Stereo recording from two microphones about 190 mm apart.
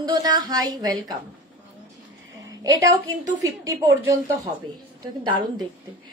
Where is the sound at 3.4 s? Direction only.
15° right (ahead or behind).